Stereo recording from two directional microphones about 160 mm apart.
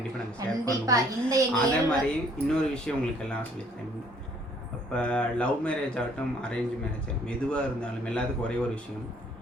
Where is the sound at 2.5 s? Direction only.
5° left (ahead or behind).